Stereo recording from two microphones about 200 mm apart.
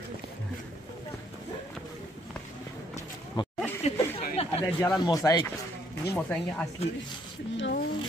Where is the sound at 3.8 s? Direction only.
30° left (ahead or behind).